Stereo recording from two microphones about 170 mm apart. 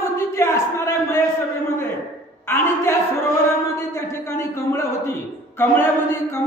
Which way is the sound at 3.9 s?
15° left (ahead or behind).